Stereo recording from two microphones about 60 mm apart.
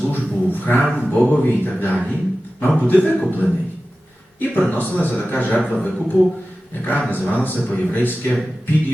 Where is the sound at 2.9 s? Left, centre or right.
Left.